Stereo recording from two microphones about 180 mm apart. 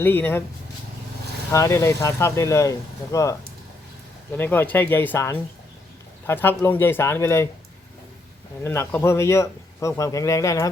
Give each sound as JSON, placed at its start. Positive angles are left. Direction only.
{"t": 0.0, "sound": "a man's voice", "side_deg": 10}
{"t": 1.5, "sound": "a man's voice", "side_deg": 15}
{"t": 8.6, "sound": "a man's voice", "side_deg": 15}